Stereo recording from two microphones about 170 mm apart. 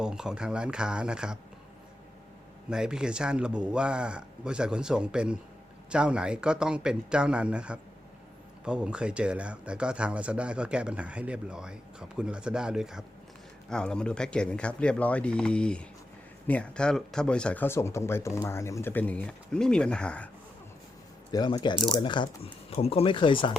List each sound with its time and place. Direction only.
0.0 s speech: 5° right (ahead or behind)
2.6 s speech: 5° right (ahead or behind)
21.3 s speech: 25° left (ahead or behind)